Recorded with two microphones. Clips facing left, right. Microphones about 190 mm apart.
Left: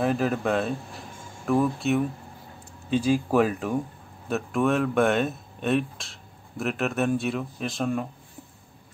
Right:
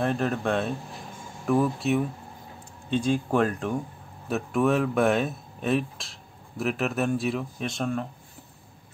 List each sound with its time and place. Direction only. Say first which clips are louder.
0.0 s speech: left 2 dB; 5° left (ahead or behind)